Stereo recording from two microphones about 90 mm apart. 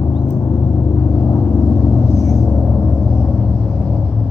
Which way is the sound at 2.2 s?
40° left (ahead or behind).